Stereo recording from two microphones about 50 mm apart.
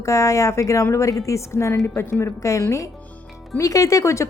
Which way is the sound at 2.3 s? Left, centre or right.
Left.